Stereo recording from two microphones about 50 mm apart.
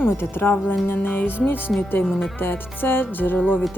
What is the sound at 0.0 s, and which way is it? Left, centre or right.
Speech, left.